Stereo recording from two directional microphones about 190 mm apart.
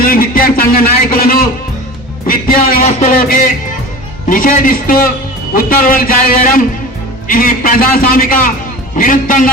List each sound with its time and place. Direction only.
0.0 s a sound: 50° left (ahead or behind)
2.2 s music: 50° left (ahead or behind)
4.3 s a man's voice: 45° left (ahead or behind)